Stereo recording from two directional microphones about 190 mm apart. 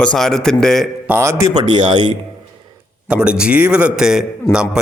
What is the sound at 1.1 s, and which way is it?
Speech, 15° right (ahead or behind).